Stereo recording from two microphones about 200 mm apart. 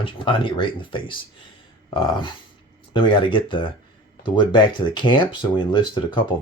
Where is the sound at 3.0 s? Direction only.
25° left (ahead or behind).